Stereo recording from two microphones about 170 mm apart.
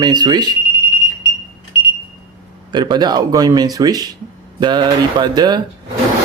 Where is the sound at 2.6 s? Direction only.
25° right (ahead or behind).